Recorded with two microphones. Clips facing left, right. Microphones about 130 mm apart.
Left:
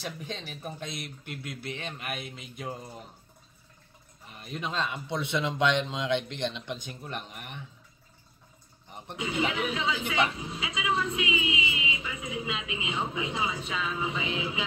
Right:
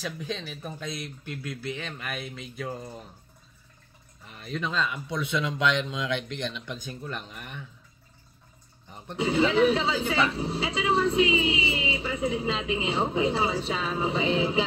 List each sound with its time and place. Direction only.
0.4 s speech: 15° left (ahead or behind)
4.5 s speech: 20° left (ahead or behind)
9.1 s speech: 30° right (ahead or behind)